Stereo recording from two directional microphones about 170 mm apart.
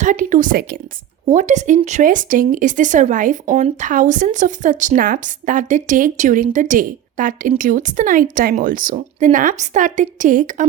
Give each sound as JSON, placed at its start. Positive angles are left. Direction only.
{"t": 0.0, "sound": "speech", "side_deg": -50}